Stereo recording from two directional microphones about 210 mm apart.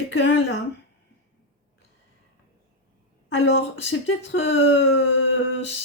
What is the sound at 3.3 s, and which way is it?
Speech, 60° left (ahead or behind).